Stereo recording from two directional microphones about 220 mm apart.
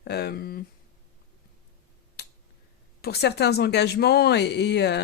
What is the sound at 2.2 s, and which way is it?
Finger snapping, 50° left (ahead or behind).